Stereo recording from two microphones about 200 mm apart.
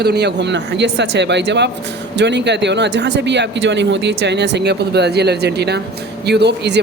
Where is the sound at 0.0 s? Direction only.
55° right (ahead or behind).